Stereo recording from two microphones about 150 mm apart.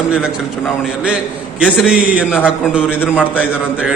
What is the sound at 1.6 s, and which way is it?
A man's voice, 5° right (ahead or behind).